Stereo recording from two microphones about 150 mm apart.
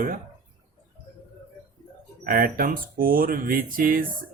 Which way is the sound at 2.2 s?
70° right (ahead or behind).